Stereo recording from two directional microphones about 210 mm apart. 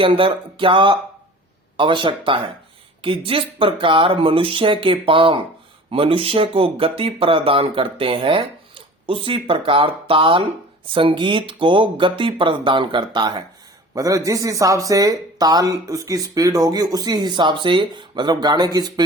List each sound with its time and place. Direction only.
0.0 s speech: 25° right (ahead or behind)